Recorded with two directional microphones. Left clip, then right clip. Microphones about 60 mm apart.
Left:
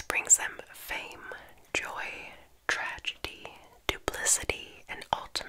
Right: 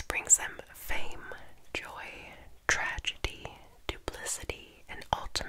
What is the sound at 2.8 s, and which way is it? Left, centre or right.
Whispering, right.